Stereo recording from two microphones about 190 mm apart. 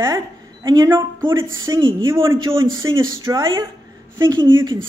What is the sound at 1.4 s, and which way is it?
Speech, 90° right.